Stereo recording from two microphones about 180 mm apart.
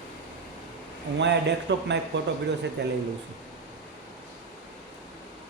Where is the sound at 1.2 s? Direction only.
75° right (ahead or behind).